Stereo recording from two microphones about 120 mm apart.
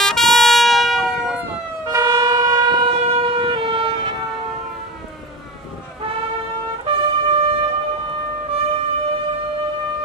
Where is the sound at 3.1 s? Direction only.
45° right (ahead or behind).